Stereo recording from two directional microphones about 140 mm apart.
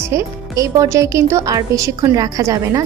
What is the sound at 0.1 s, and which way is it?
Speech, 20° right (ahead or behind).